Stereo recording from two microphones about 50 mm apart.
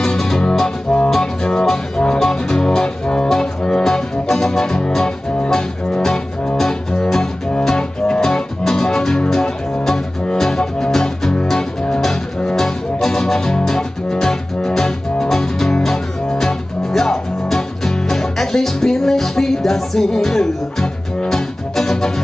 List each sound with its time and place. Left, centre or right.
0.0 s music: centre